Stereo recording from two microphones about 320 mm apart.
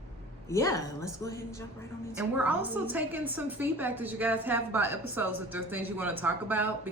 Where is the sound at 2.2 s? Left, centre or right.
Centre.